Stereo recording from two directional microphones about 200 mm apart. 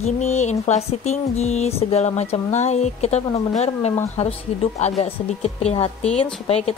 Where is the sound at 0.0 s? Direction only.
35° left (ahead or behind).